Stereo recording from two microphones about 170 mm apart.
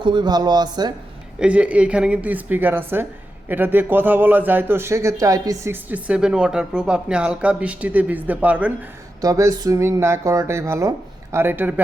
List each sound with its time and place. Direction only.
0.0 s speech: 25° right (ahead or behind)
1.4 s a man's voice: 5° right (ahead or behind)
9.2 s a man's voice: 20° right (ahead or behind)